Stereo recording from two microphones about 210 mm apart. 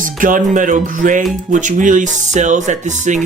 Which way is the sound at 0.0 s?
40° right (ahead or behind).